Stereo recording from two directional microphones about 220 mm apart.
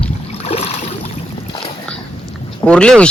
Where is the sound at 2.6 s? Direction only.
5° left (ahead or behind).